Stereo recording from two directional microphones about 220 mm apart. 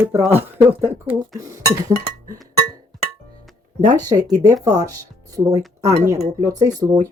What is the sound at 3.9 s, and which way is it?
Speech, 15° right (ahead or behind).